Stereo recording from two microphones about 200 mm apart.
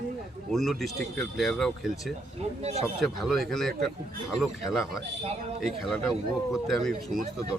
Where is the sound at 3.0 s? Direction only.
Centre (ahead or behind).